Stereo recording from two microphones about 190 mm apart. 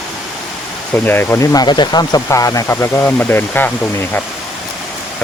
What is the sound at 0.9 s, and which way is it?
Speech, 10° left (ahead or behind).